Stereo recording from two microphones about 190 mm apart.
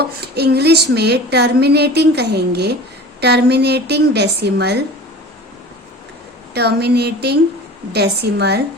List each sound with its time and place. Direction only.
0.0 s speech: 55° right (ahead or behind)
6.5 s speech: 60° right (ahead or behind)